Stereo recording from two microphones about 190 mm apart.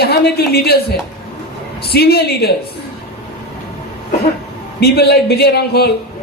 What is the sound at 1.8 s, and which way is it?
Speech, 55° left (ahead or behind).